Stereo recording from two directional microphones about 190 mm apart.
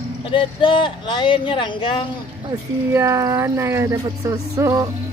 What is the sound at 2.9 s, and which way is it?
Speech, 15° right (ahead or behind).